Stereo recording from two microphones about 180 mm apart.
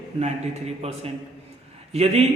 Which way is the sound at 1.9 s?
35° right (ahead or behind).